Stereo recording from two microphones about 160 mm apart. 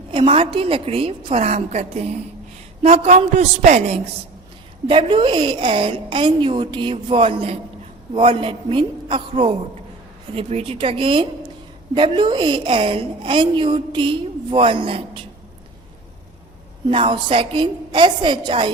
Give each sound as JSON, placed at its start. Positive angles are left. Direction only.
{"t": 0.1, "sound": "a woman's voice", "side_deg": -35}
{"t": 4.9, "sound": "a woman's voice", "side_deg": -30}
{"t": 16.9, "sound": "a woman's voice", "side_deg": -30}